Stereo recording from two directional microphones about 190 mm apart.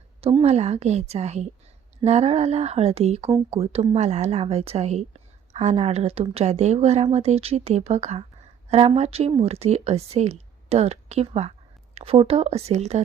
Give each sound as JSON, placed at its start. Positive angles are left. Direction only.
{"t": 0.2, "sound": "speech", "side_deg": -30}